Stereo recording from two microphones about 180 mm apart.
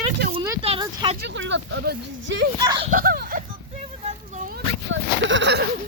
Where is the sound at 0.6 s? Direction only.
30° right (ahead or behind).